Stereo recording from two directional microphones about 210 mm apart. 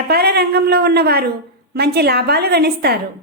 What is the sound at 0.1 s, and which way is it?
A woman's voice, 50° right (ahead or behind).